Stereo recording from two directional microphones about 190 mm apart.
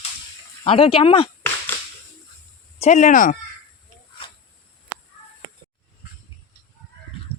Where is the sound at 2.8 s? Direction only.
40° left (ahead or behind).